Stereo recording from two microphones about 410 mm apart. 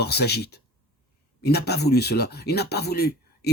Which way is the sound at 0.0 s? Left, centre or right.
Left.